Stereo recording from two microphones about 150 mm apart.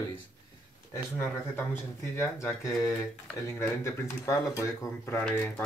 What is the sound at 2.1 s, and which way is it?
Speech, 20° left (ahead or behind).